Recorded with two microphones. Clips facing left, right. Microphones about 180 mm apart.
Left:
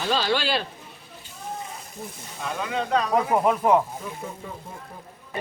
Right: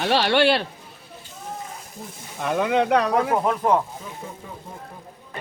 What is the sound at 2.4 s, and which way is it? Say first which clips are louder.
Speech: right 8 dB; 60° right (ahead or behind).